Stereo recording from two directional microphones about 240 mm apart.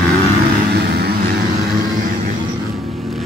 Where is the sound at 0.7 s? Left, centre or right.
Right.